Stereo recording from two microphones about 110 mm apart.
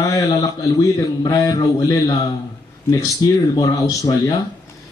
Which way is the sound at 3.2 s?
35° left (ahead or behind).